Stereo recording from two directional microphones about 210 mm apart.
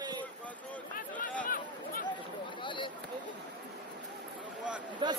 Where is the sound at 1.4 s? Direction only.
40° left (ahead or behind).